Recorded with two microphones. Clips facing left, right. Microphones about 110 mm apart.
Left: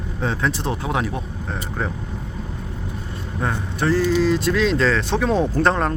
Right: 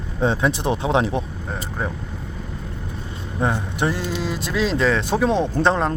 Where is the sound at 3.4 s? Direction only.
20° right (ahead or behind).